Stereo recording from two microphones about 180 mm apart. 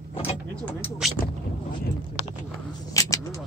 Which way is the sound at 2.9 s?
20° left (ahead or behind).